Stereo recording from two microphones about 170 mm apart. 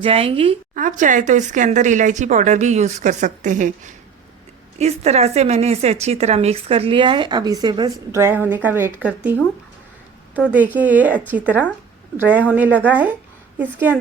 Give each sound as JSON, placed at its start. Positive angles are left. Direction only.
{"t": 0.0, "sound": "a woman's voice", "side_deg": -35}
{"t": 0.7, "sound": "a woman's voice", "side_deg": -50}
{"t": 10.5, "sound": "speech", "side_deg": -10}